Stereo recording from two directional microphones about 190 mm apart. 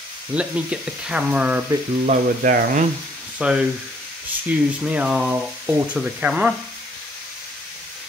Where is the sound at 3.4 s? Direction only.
5° right (ahead or behind).